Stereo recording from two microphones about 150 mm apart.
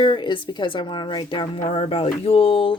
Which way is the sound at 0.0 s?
35° left (ahead or behind).